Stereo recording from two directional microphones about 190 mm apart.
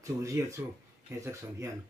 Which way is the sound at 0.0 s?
15° right (ahead or behind).